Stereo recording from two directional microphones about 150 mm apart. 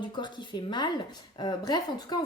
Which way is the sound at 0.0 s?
30° left (ahead or behind).